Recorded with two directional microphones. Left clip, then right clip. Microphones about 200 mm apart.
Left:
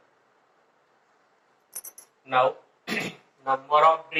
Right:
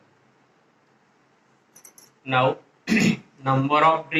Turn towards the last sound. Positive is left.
turn(degrees=-30)  # may be behind; listen again after turning